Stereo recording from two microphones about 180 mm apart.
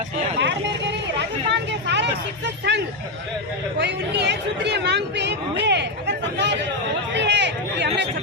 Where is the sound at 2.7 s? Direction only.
75° right (ahead or behind).